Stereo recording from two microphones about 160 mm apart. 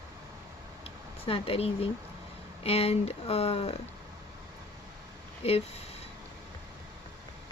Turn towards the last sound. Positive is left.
turn(degrees=40)  # may be behind; listen again after turning